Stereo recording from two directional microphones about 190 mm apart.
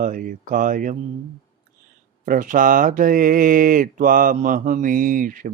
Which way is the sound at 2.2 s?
45° right (ahead or behind).